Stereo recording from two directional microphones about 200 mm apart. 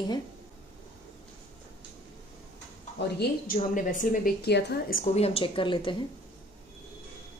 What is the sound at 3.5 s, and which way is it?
A woman's voice, 40° left (ahead or behind).